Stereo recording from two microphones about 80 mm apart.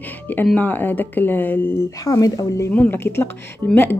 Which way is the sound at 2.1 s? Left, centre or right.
Left.